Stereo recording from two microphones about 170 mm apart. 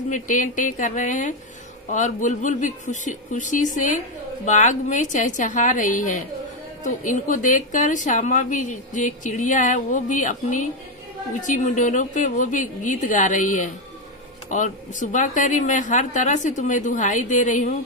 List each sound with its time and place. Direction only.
0.1 s a woman's voice: 50° left (ahead or behind)